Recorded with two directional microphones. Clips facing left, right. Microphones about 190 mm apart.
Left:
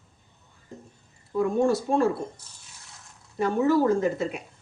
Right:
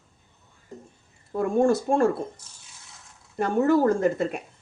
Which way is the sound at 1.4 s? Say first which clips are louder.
Right 1 dB; 50° right (ahead or behind).